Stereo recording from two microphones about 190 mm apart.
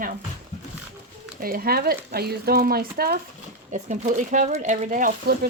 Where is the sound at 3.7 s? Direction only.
40° right (ahead or behind).